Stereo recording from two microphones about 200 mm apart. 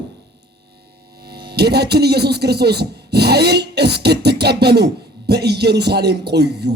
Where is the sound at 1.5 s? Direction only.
55° right (ahead or behind).